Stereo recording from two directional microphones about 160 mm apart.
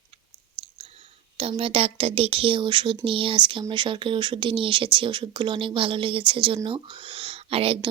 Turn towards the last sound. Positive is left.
turn(degrees=-40)  # may be behind; listen again after turning